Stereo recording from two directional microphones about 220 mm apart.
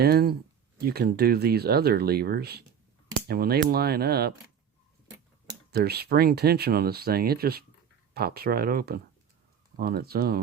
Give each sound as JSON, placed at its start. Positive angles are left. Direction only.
{"t": 0.0, "sound": "speech", "side_deg": -45}
{"t": 5.7, "sound": "speech", "side_deg": -45}